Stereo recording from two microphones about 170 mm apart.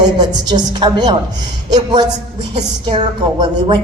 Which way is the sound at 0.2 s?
25° right (ahead or behind).